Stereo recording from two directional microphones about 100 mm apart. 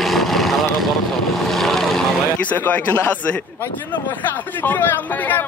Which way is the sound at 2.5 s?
15° left (ahead or behind).